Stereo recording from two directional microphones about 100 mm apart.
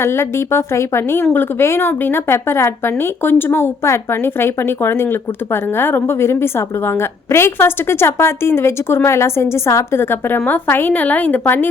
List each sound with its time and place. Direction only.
0.0 s speech: 25° left (ahead or behind)